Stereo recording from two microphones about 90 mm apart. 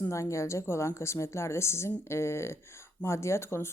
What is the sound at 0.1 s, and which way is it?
Speech, 35° left (ahead or behind).